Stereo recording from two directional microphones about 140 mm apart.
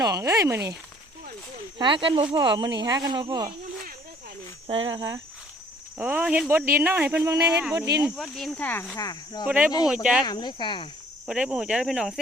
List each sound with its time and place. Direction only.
0.0 s speech: 25° right (ahead or behind)
1.8 s speech: 35° right (ahead or behind)
4.6 s speech: 40° right (ahead or behind)
6.0 s speech: 10° right (ahead or behind)
8.1 s speech: centre (ahead or behind)
8.6 s speech: 15° left (ahead or behind)
9.0 s speech: 30° left (ahead or behind)
9.5 s speech: 10° right (ahead or behind)
10.2 s speech: 30° left (ahead or behind)
11.3 s speech: 5° right (ahead or behind)